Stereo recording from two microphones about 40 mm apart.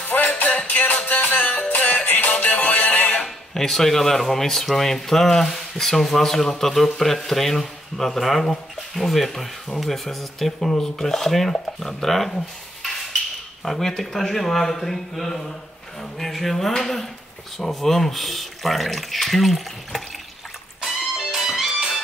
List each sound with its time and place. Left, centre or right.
0.7 s music: left
3.5 s speech: centre
13.7 s speech: centre
20.8 s music: centre